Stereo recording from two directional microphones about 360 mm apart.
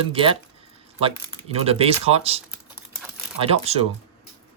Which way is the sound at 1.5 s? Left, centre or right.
Centre.